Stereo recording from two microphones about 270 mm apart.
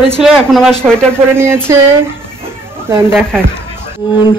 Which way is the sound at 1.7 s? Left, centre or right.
Centre.